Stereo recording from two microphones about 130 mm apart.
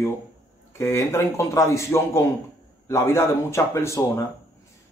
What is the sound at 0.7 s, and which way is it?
Speech, 20° left (ahead or behind).